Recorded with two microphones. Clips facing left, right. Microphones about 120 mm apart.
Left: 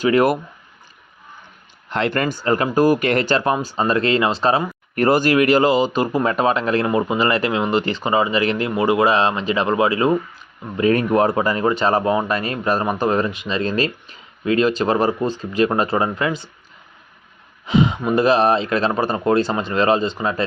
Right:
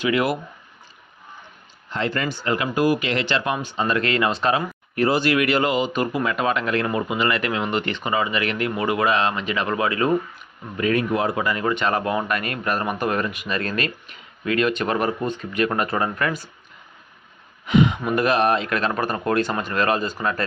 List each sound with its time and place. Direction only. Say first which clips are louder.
0.0 s speech: left 6 dB; 45° left (ahead or behind)
1.9 s speech: left 4 dB; 65° left (ahead or behind); by 4.6 s 30° left (ahead or behind)
4.9 s speech: left 4 dB; 50° left (ahead or behind); by 10.2 s 30° left (ahead or behind)
10.9 s speech: left 4 dB; 45° left (ahead or behind); by 16.5 s 25° left (ahead or behind)
17.7 s speech: left 1 dB; 30° left (ahead or behind)